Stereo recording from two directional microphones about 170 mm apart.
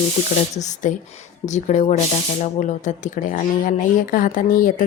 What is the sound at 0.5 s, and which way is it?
A woman's voice, 45° left (ahead or behind).